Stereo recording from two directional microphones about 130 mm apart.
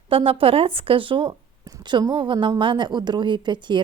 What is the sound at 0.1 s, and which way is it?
A woman's voice, 45° right (ahead or behind).